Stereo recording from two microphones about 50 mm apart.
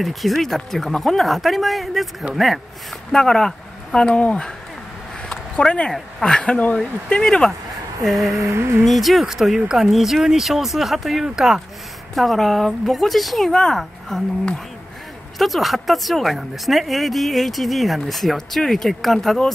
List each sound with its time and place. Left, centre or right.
0.0 s speech: centre
3.1 s speech: centre
4.1 s speech: left
5.3 s a sound: centre
6.2 s speech: centre
8.4 s a sound: right
8.8 s speech: centre
12.2 s speech: centre
13.5 s speech: centre
15.3 s speech: centre